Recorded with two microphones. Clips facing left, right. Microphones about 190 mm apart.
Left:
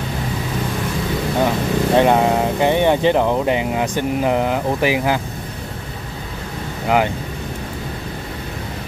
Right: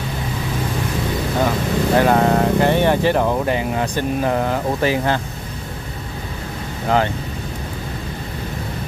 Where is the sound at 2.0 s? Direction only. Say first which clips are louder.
Even; 15° left (ahead or behind).